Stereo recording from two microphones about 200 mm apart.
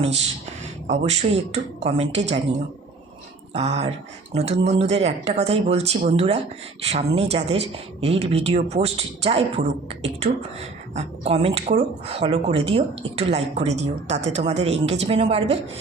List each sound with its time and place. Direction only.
0.9 s speech: 30° right (ahead or behind)
3.5 s speech: 30° right (ahead or behind)